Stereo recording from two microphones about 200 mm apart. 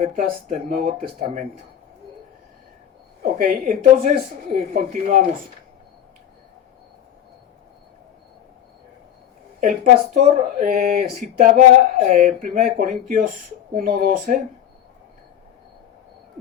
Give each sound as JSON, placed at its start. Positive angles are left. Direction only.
{"t": 0.0, "sound": "speech", "side_deg": -35}
{"t": 3.3, "sound": "speech", "side_deg": -45}
{"t": 9.6, "sound": "speech", "side_deg": -45}